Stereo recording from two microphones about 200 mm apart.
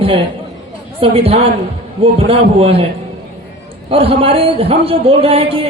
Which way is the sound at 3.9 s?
30° right (ahead or behind).